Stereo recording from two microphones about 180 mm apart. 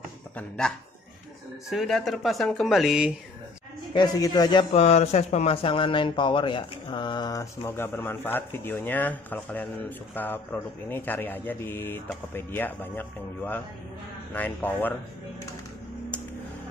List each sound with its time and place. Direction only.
0.4 s speech: 5° left (ahead or behind)
3.9 s a man's voice: 25° left (ahead or behind)